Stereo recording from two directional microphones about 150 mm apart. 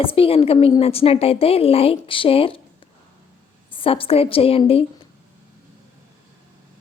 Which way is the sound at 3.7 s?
35° left (ahead or behind).